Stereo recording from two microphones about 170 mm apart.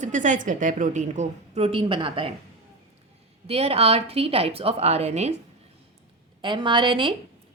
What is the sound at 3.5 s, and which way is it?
A woman's voice, 35° right (ahead or behind).